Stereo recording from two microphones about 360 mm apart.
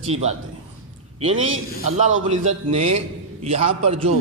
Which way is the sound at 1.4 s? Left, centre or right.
Right.